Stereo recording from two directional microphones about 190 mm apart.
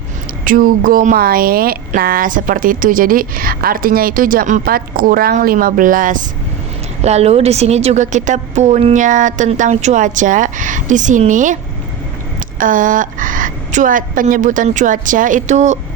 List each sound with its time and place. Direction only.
0.4 s speech: 45° right (ahead or behind)
7.0 s a woman's voice: 35° right (ahead or behind)
12.5 s speech: 45° right (ahead or behind)